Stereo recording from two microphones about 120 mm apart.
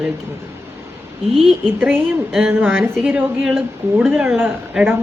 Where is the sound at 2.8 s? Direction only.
10° right (ahead or behind).